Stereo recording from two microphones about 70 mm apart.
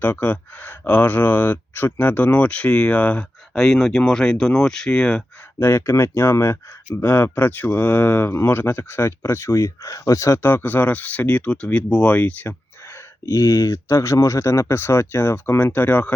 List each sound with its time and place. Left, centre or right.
0.0 s speech: left
3.5 s speech: centre
5.5 s speech: left
13.3 s speech: left